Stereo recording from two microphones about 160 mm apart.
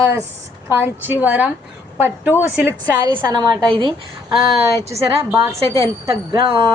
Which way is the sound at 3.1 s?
25° right (ahead or behind).